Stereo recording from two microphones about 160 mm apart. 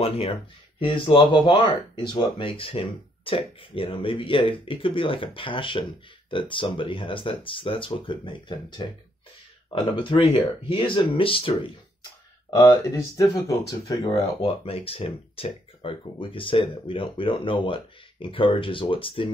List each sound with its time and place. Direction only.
0.0 s speech: 40° left (ahead or behind); by 14.2 s 20° left (ahead or behind)
14.4 s speech: 35° left (ahead or behind)